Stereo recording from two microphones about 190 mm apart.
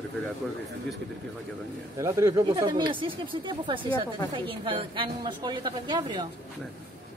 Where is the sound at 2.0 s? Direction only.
15° right (ahead or behind).